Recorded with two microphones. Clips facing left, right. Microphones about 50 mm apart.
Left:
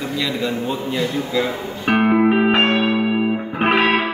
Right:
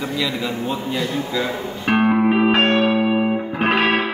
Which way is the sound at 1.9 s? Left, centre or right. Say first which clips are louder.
Left 1 dB; centre.